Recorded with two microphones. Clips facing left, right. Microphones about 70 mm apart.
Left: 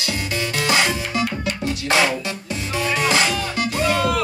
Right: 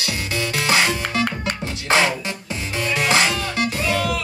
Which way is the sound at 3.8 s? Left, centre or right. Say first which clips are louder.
Left 5 dB; left.